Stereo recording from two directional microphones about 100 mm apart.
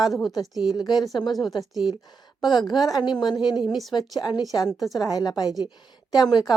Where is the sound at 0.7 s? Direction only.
45° left (ahead or behind).